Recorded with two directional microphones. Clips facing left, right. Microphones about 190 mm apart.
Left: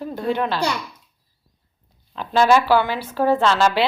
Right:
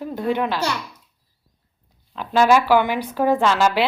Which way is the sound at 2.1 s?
10° right (ahead or behind).